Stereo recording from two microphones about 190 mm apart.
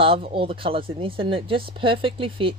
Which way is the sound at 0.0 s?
30° right (ahead or behind).